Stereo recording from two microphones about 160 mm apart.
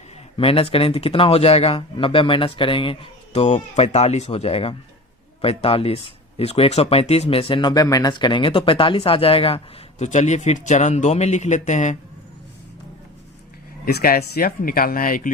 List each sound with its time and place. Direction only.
0.3 s speech: 35° left (ahead or behind)
13.8 s speech: 65° left (ahead or behind)